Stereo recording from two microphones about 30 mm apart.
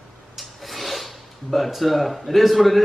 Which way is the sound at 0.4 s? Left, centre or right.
Centre.